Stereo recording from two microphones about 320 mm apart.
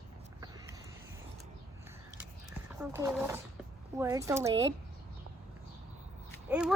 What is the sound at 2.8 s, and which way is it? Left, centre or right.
Speech, centre.